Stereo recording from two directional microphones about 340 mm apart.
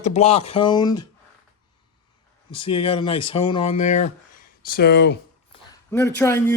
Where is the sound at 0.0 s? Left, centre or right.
Centre.